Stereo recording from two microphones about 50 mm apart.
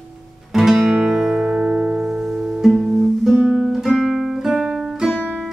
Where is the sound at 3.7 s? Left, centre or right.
Centre.